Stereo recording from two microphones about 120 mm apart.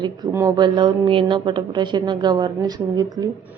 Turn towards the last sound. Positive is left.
turn(degrees=-35)  # may be behind; listen again after turning